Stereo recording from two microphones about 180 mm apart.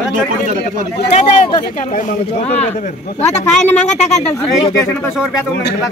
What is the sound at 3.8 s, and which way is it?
Speech, 40° left (ahead or behind).